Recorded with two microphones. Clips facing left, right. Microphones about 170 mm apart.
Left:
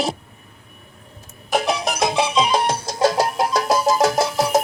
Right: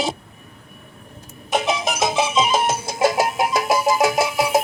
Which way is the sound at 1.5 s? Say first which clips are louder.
Left 1 dB; centre (ahead or behind).